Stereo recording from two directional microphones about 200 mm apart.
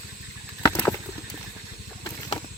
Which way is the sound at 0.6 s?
15° left (ahead or behind).